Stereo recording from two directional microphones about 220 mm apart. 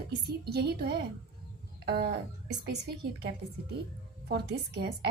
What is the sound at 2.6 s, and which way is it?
A woman's voice, 45° right (ahead or behind).